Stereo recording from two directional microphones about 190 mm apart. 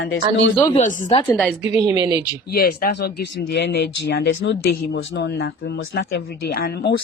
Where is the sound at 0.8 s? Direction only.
40° left (ahead or behind).